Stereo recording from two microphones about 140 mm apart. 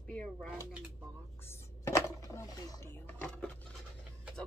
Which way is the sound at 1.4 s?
20° left (ahead or behind).